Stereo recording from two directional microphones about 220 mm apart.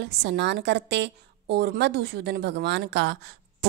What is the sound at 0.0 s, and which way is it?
A woman's voice, 50° right (ahead or behind).